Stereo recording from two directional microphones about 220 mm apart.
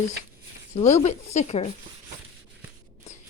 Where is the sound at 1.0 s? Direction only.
30° left (ahead or behind).